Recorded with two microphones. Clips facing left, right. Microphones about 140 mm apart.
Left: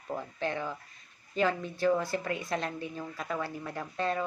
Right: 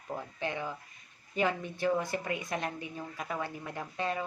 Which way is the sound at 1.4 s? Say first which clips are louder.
Left 2 dB; 15° right (ahead or behind).